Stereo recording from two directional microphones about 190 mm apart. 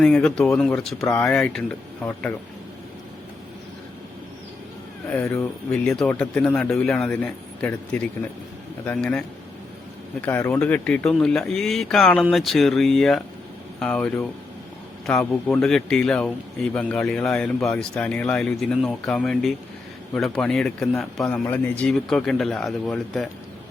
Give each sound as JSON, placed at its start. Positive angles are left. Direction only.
{"t": 0.0, "sound": "a man's voice", "side_deg": 5}
{"t": 5.0, "sound": "a man's voice", "side_deg": 10}